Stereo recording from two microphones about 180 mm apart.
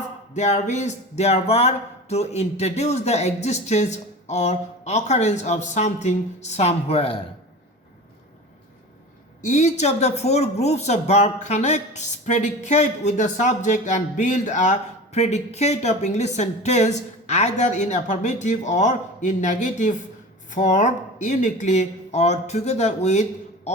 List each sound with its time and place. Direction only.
0.3 s speech: 40° left (ahead or behind)
9.4 s speech: 40° left (ahead or behind)